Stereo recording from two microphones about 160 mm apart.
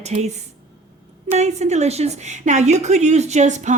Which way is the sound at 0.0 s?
45° right (ahead or behind).